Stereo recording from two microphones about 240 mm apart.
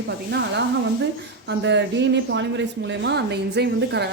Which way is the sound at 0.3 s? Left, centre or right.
Right.